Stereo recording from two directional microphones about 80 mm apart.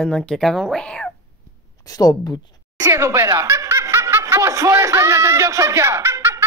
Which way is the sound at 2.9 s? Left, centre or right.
Right.